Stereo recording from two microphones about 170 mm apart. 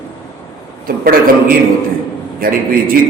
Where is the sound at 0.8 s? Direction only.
60° right (ahead or behind).